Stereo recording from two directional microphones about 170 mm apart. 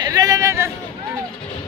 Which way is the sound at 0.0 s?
20° right (ahead or behind).